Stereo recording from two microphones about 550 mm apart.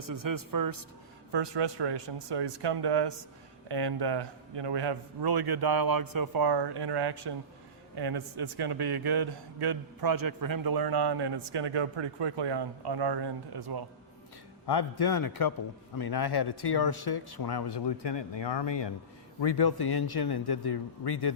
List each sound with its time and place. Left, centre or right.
0.0 s a man's voice: right
1.3 s a man's voice: right
14.7 s speech: left